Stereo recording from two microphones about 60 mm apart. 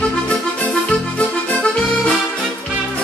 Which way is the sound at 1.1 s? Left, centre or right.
Centre.